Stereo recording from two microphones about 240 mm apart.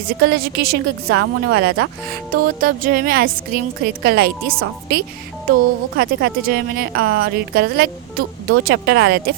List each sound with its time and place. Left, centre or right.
0.2 s a woman's voice: right